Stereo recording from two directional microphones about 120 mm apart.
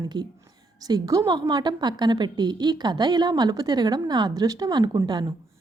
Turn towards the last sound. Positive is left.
turn(degrees=-35)  # may be behind; listen again after turning